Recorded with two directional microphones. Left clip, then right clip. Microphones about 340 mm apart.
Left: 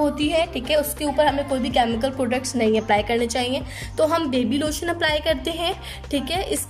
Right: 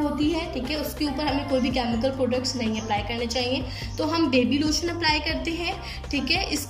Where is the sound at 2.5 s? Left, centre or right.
Left.